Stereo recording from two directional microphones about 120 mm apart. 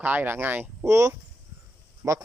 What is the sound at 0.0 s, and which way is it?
Speech, 15° right (ahead or behind).